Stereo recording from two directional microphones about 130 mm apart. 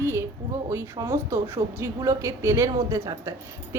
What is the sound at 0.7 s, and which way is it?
A woman's voice, 20° right (ahead or behind).